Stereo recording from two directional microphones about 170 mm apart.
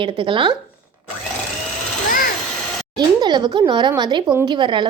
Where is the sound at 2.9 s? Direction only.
25° right (ahead or behind).